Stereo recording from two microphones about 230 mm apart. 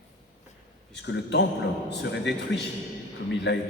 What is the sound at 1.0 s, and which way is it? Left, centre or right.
A man's voice, left.